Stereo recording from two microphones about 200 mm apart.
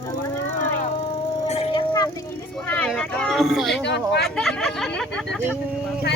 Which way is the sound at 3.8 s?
60° left (ahead or behind).